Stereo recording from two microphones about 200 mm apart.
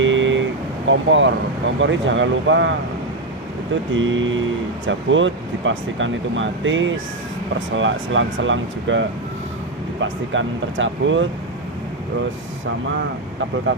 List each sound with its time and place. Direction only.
0.0 s vehicle: 70° right (ahead or behind)
0.9 s speech: 70° right (ahead or behind)
3.9 s speech: 70° right (ahead or behind)
13.7 s speech: 70° right (ahead or behind)